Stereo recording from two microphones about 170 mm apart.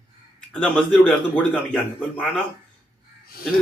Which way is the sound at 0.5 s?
5° left (ahead or behind).